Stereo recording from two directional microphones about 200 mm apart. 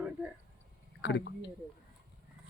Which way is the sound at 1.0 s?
60° left (ahead or behind).